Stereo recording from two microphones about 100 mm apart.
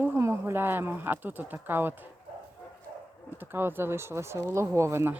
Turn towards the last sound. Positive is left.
turn(degrees=-30)  # may be behind; listen again after turning